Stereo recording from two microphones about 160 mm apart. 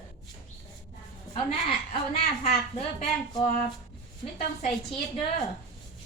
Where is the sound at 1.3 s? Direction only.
35° left (ahead or behind).